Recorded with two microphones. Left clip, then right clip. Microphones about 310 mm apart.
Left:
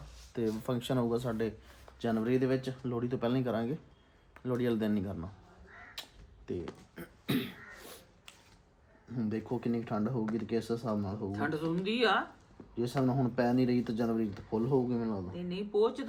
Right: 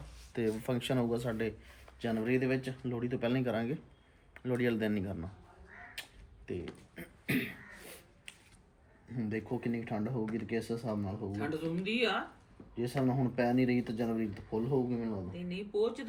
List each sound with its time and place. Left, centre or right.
0.6 s speech: centre
6.5 s a sound: centre
9.1 s speech: centre